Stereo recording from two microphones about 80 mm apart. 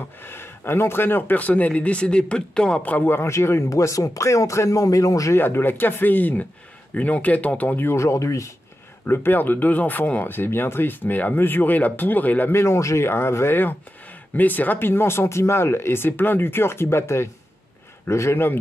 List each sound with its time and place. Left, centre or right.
0.2 s speech: left
5.4 s speech: left
9.0 s speech: left